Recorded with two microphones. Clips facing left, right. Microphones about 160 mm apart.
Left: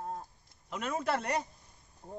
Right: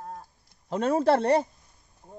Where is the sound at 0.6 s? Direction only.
35° right (ahead or behind).